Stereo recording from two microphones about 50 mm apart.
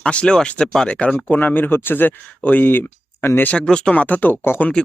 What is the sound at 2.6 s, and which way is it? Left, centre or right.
Speech, left.